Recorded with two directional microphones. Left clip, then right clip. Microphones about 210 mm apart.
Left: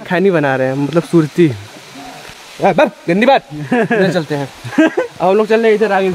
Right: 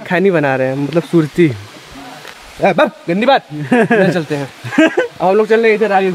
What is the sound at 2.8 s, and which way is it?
Speech, 45° left (ahead or behind).